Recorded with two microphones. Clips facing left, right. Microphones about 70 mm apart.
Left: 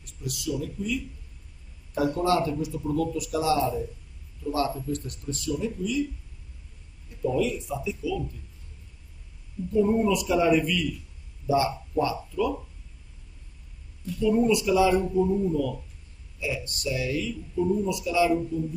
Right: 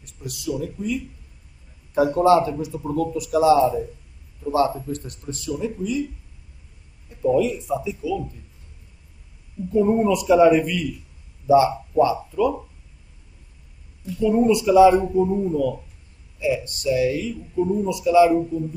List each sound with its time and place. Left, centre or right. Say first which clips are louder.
0.0 s speech: right 2 dB; right
2.1 s speech: right 9 dB; right
7.1 s speech: right 6 dB; right
9.7 s speech: right 4 dB; right
14.2 s speech: right 4 dB; right